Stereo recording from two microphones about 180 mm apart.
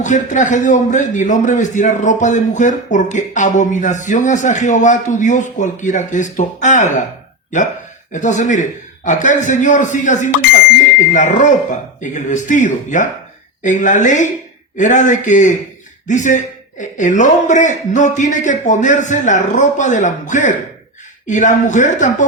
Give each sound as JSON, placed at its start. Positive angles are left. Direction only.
{"t": 0.0, "sound": "a man's voice", "side_deg": 45}
{"t": 8.1, "sound": "a man's voice", "side_deg": 45}